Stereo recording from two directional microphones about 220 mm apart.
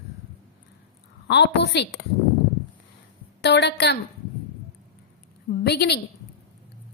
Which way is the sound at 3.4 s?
50° left (ahead or behind).